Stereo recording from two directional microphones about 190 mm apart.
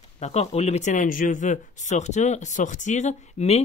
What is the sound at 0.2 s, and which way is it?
Speech, 35° left (ahead or behind).